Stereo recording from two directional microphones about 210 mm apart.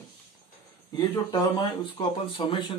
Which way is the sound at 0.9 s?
20° left (ahead or behind).